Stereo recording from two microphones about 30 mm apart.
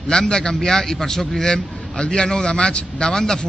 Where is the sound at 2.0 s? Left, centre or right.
Left.